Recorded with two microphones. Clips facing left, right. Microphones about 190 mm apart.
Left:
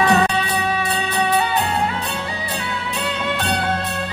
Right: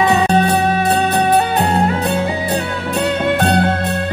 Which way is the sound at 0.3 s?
45° right (ahead or behind).